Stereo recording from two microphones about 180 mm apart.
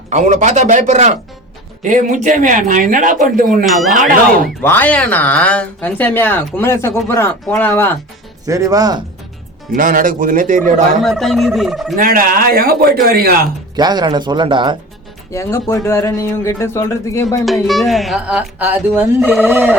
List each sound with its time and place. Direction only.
0.1 s a man's voice: 40° right (ahead or behind)
3.7 s speech: centre (ahead or behind)
4.6 s speech: 10° left (ahead or behind)
8.4 s speech: 20° right (ahead or behind)
9.7 s speech: 50° right (ahead or behind)
11.0 s speech: centre (ahead or behind)
11.9 s speech: 50° right (ahead or behind)
13.7 s speech: 25° right (ahead or behind)
15.3 s speech: 15° left (ahead or behind)
17.4 s speech: centre (ahead or behind)